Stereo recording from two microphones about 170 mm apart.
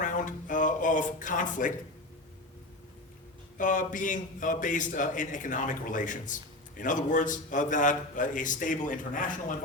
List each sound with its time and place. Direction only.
0.0 s music: 50° left (ahead or behind)
3.6 s a man's voice: 50° left (ahead or behind)